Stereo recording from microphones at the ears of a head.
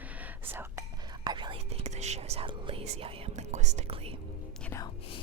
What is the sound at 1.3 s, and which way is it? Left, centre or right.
Whispering, right.